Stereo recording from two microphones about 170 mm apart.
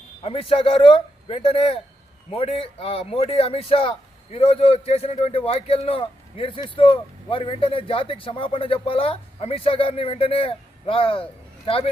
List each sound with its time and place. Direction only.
0.2 s a man's voice: 35° left (ahead or behind)